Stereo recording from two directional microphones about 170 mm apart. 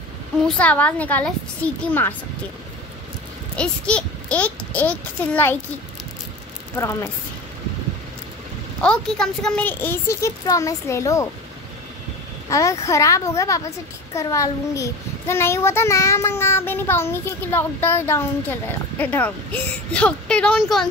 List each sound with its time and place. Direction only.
0.5 s a child's voice: 10° left (ahead or behind)
3.5 s a child's voice: 5° left (ahead or behind)
6.8 s a child's voice: 15° left (ahead or behind)
8.8 s a child's voice: 5° left (ahead or behind)
12.4 s a child's voice: 20° left (ahead or behind); by 20.9 s centre (ahead or behind)